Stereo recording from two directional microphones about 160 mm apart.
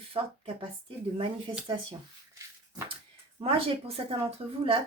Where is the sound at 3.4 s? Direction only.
35° right (ahead or behind).